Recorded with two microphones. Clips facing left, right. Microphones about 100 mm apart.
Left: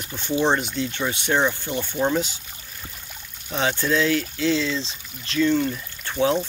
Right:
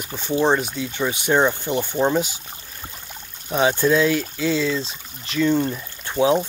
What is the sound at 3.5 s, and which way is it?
Speech, 15° right (ahead or behind).